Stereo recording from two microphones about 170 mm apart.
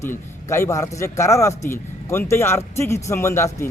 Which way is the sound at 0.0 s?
15° left (ahead or behind).